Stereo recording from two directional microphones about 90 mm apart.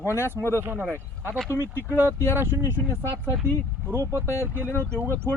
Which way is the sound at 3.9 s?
30° right (ahead or behind).